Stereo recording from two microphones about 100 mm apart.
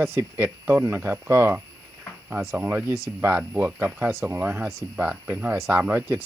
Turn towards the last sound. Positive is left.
turn(degrees=-20)  # may be behind; listen again after turning